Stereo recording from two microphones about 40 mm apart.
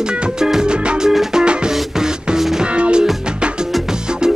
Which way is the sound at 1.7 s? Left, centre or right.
Centre.